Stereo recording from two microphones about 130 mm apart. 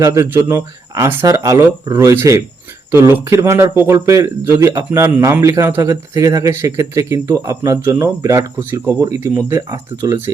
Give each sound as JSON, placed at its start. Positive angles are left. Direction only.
{"t": 0.0, "sound": "speech", "side_deg": -25}